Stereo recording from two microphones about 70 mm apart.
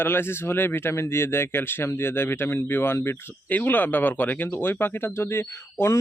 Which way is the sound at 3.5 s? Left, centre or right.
Left.